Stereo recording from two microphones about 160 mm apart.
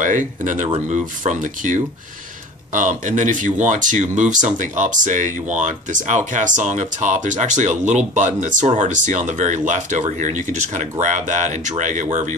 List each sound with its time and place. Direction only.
0.0 s speech: 50° right (ahead or behind)